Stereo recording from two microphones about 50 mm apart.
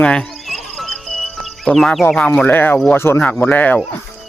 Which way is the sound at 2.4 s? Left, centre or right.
Left.